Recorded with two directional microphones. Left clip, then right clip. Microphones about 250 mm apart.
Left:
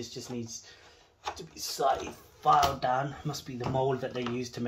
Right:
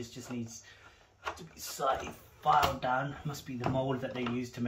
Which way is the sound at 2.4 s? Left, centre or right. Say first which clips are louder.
Left 3 dB; left.